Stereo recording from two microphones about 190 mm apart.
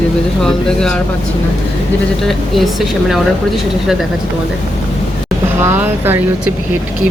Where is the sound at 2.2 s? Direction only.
Centre (ahead or behind).